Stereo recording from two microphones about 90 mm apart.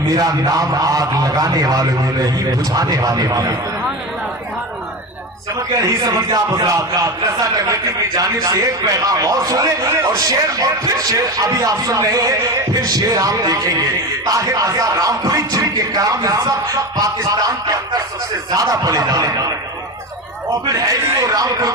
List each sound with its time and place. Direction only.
0.1 s a man's voice: 45° right (ahead or behind)
5.7 s a man's voice: 45° right (ahead or behind)
9.9 s a man's voice: 30° right (ahead or behind)
10.2 s a man's voice: 40° right (ahead or behind)
20.7 s speech: 40° right (ahead or behind)